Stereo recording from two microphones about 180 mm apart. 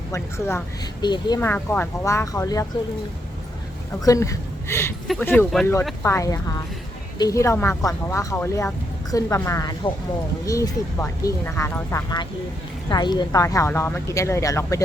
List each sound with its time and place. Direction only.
0.1 s speech: 15° left (ahead or behind)
1.4 s speech: 10° left (ahead or behind)
4.0 s speech: 20° left (ahead or behind)